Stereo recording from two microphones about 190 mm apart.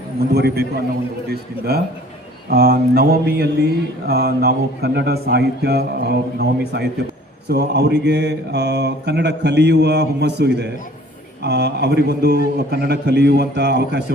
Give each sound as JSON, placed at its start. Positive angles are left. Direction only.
{"t": 0.3, "sound": "mantra", "side_deg": -60}
{"t": 2.5, "sound": "speech", "side_deg": -55}
{"t": 4.0, "sound": "mantra", "side_deg": -55}